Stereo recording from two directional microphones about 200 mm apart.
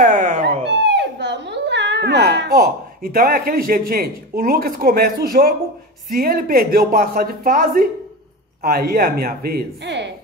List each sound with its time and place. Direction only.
0.0 s cat: 40° right (ahead or behind)
0.7 s a sound: 60° right (ahead or behind)
6.1 s speech: 50° right (ahead or behind)